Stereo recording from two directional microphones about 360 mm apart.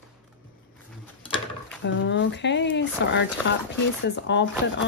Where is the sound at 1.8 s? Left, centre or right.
Left.